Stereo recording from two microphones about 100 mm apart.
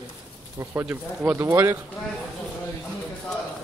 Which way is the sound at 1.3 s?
25° right (ahead or behind).